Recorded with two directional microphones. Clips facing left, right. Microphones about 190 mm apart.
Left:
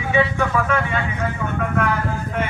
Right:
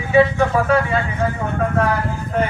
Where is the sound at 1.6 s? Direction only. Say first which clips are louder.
Right 3 dB; 35° right (ahead or behind).